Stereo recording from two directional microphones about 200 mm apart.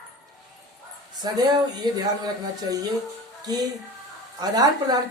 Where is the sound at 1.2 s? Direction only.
20° right (ahead or behind).